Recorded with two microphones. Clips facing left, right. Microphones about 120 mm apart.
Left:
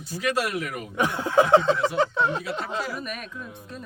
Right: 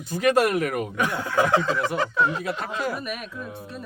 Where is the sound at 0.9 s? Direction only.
20° left (ahead or behind).